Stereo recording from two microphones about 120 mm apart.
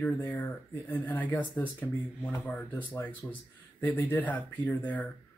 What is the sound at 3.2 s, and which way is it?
Speech, 10° left (ahead or behind).